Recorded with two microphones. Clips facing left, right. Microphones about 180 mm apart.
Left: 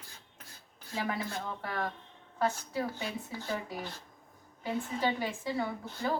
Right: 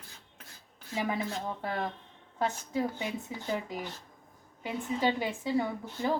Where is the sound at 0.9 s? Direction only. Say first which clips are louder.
Right 3 dB; 15° right (ahead or behind).